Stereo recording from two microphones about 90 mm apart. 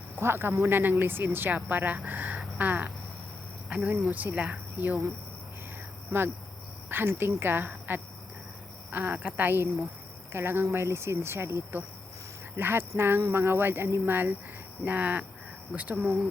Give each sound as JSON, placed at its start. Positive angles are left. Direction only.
{"t": 0.2, "sound": "speech", "side_deg": -25}
{"t": 6.1, "sound": "speech", "side_deg": -25}